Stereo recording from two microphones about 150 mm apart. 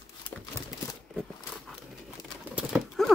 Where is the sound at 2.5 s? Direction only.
5° right (ahead or behind).